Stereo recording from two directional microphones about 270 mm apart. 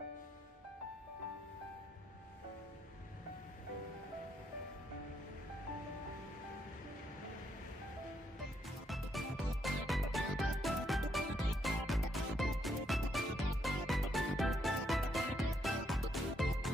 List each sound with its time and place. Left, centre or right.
8.8 s music: centre